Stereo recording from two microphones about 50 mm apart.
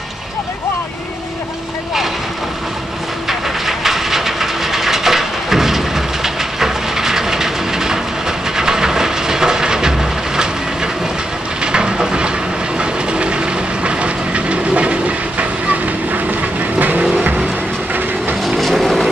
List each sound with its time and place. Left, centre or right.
3.3 s train: centre
11.6 s a sound: centre
12.7 s train: right
18.4 s vehicle: centre